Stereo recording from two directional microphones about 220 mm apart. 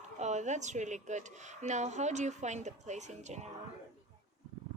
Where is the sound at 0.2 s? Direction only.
30° right (ahead or behind).